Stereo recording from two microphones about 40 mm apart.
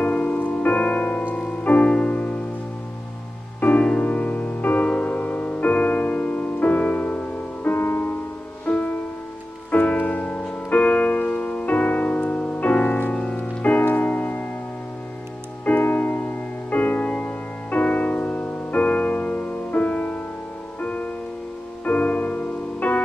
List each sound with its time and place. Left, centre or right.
0.0 s music: left
4.0 s music: left
6.6 s music: left
8.6 s music: left
15.8 s music: left